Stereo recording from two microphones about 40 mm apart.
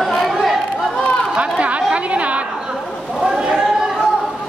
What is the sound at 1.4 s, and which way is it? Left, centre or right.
Chatter, right.